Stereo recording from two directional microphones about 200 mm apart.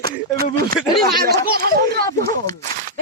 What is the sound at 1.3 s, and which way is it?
Children playing, 50° right (ahead or behind).